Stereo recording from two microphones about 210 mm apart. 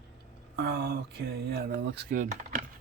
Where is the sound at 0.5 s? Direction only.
50° right (ahead or behind).